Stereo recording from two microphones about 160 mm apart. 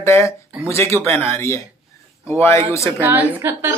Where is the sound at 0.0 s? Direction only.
15° left (ahead or behind).